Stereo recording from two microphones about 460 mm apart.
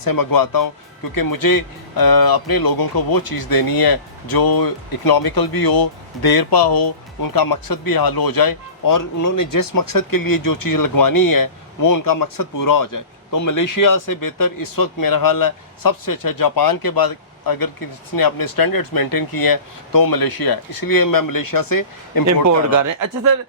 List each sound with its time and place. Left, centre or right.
0.0 s speech: left
22.3 s speech: right